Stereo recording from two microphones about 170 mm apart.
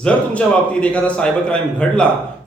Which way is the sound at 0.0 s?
5° left (ahead or behind).